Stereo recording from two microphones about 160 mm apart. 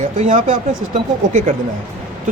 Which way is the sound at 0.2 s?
50° right (ahead or behind).